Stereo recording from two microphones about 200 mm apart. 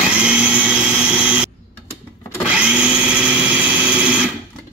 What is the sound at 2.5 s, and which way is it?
Tools, 5° right (ahead or behind).